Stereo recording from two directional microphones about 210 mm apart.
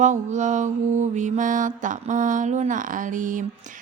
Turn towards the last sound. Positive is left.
turn(degrees=-40)  # may be behind; listen again after turning